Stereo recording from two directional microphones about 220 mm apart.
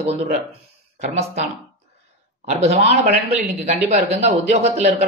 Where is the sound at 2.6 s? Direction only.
30° right (ahead or behind).